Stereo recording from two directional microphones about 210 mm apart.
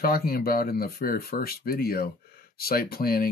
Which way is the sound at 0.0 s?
45° left (ahead or behind).